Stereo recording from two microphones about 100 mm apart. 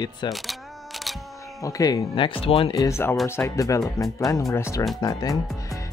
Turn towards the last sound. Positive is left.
turn(degrees=40)  # may be behind; listen again after turning